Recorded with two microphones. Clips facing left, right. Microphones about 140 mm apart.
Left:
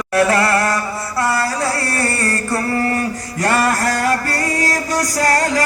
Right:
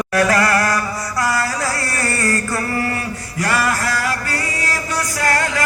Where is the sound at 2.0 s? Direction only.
30° left (ahead or behind).